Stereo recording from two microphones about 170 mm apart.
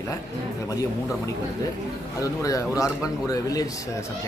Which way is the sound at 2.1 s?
20° left (ahead or behind).